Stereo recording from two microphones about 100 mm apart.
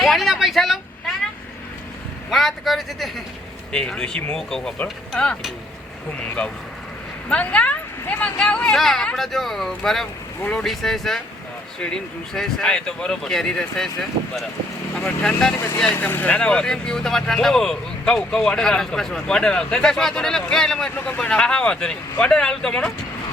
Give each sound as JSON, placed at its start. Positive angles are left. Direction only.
{"t": 0.0, "sound": "a sound", "side_deg": 0}
{"t": 2.3, "sound": "speech", "side_deg": 0}
{"t": 7.3, "sound": "speech", "side_deg": 10}
{"t": 12.3, "sound": "speech", "side_deg": 5}
{"t": 14.9, "sound": "speech", "side_deg": 5}
{"t": 15.5, "sound": "speech", "side_deg": 25}
{"t": 20.9, "sound": "speech", "side_deg": 15}